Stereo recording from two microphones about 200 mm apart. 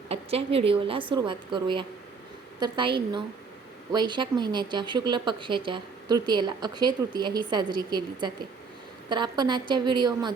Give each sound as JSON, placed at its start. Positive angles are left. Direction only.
{"t": 0.1, "sound": "speech", "side_deg": -30}
{"t": 3.9, "sound": "speech", "side_deg": -20}